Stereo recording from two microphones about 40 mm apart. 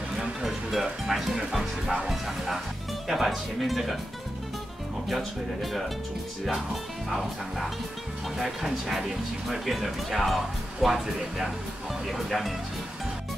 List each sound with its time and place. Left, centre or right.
0.4 s music: centre
1.0 s speech: centre
5.0 s speech: centre